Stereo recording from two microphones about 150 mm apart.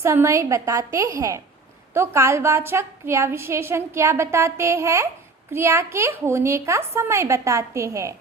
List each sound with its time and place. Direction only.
0.0 s a woman's voice: 20° right (ahead or behind)